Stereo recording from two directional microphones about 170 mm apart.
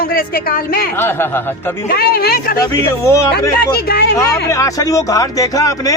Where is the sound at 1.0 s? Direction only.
15° left (ahead or behind).